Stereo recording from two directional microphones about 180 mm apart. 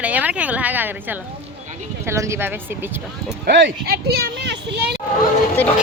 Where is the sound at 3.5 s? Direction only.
75° right (ahead or behind).